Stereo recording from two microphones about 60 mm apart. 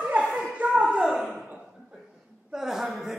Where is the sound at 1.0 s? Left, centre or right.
Centre.